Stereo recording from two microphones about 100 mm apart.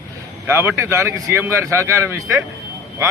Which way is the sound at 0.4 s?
25° right (ahead or behind).